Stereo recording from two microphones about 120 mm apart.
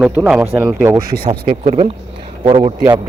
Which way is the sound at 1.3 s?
80° right.